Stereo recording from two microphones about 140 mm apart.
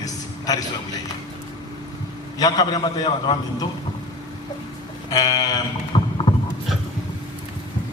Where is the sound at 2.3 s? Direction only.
30° left (ahead or behind).